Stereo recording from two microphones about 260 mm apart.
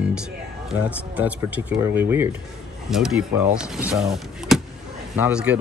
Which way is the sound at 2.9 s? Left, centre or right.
Centre.